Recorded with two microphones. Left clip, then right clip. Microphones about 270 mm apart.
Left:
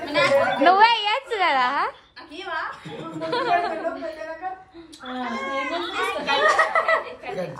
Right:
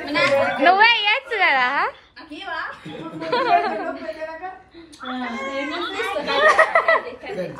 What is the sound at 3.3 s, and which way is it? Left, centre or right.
Child singing, centre.